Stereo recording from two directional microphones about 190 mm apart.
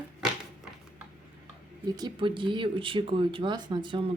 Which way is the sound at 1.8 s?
20° right (ahead or behind).